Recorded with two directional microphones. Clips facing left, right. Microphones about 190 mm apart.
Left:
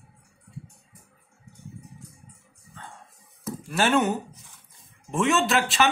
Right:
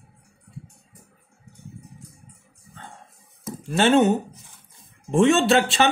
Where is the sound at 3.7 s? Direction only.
25° right (ahead or behind).